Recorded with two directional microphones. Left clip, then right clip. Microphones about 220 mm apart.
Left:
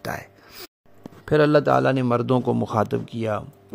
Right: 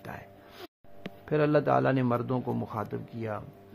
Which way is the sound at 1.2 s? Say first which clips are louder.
Left 8 dB; 35° left (ahead or behind).